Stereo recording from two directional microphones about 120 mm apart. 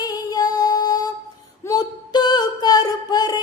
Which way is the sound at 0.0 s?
35° left (ahead or behind).